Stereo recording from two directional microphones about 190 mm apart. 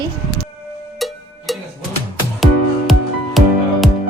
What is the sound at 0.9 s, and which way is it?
Music, centre (ahead or behind).